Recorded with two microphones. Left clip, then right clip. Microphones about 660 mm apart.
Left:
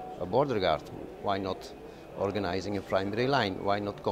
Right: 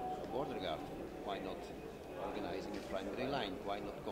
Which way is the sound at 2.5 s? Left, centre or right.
Left.